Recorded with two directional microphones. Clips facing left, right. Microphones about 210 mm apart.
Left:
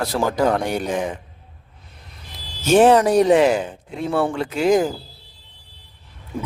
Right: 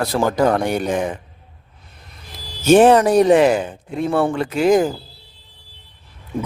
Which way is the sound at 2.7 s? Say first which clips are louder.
Right 2 dB; 55° right (ahead or behind).